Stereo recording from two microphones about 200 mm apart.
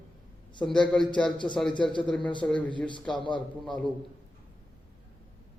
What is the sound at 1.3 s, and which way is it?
Speech, 25° left (ahead or behind).